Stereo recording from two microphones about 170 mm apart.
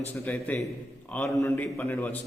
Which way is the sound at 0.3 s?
10° left (ahead or behind).